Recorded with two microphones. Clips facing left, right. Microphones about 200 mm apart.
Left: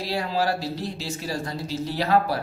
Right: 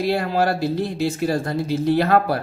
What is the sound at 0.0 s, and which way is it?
Speech, 55° right (ahead or behind).